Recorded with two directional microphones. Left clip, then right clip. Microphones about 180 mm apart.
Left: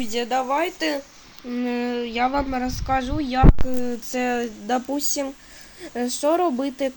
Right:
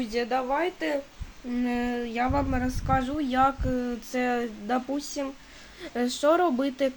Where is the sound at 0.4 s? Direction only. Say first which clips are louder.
Left 4 dB; 25° left (ahead or behind).